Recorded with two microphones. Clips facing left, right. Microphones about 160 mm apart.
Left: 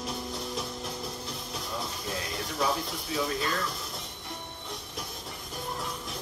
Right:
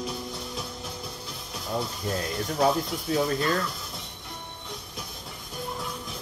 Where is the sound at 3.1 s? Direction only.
50° right (ahead or behind).